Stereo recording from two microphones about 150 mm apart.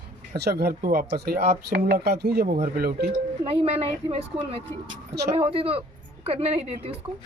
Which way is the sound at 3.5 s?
40° right (ahead or behind).